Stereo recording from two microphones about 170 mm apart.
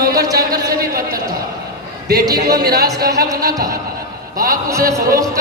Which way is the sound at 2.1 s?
20° right (ahead or behind).